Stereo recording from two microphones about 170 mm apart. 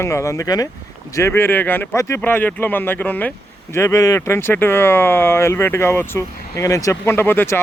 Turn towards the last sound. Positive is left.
turn(degrees=10)  # may be behind; listen again after turning